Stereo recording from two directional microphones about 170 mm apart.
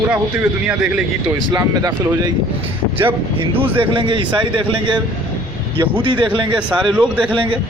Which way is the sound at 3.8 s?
30° right (ahead or behind).